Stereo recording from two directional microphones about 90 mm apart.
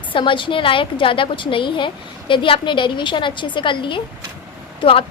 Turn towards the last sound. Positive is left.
turn(degrees=90)